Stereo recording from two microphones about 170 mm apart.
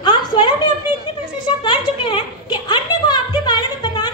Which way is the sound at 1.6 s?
30° left (ahead or behind).